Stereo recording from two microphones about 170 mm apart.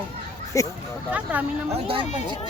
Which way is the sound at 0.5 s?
20° left (ahead or behind).